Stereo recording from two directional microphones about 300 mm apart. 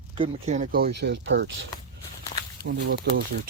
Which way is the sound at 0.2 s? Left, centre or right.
Right.